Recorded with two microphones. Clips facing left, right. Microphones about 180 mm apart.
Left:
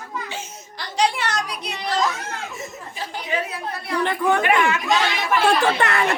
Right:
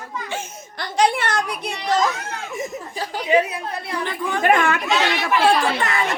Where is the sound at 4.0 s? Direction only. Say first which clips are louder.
Left 7 dB; 60° left (ahead or behind).